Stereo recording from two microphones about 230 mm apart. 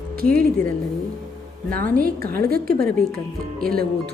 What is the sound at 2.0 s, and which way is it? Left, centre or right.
Speech, right.